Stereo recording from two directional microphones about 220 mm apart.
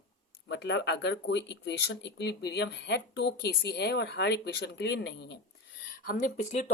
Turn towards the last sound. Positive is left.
turn(degrees=30)  # may be behind; listen again after turning